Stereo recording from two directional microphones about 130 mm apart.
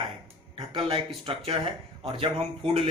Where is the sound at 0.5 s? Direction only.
40° right (ahead or behind).